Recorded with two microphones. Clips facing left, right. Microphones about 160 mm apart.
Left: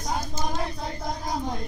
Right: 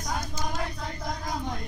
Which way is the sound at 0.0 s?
30° left (ahead or behind).